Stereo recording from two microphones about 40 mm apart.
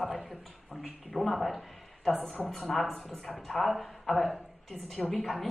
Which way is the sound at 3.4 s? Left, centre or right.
Centre.